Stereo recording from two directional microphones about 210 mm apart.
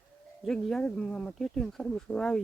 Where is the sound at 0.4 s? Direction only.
Centre (ahead or behind).